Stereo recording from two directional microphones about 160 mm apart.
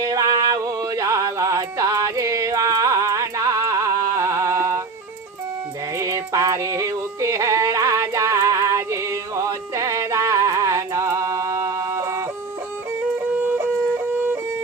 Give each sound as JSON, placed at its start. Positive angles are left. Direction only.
{"t": 0.0, "sound": "music", "side_deg": -20}
{"t": 6.0, "sound": "music", "side_deg": -20}